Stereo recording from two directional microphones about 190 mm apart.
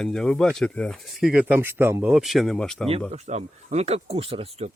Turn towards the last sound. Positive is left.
turn(degrees=-30)  # may be behind; listen again after turning